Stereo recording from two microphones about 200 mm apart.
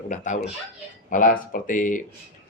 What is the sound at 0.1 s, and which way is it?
Speech, 35° left (ahead or behind).